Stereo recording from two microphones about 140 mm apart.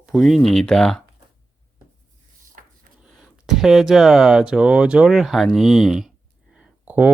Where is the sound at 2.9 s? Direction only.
75° right (ahead or behind).